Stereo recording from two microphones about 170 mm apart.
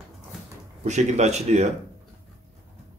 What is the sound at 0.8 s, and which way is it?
Speech, 45° right (ahead or behind).